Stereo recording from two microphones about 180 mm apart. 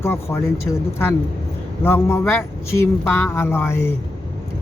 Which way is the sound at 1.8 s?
15° left (ahead or behind).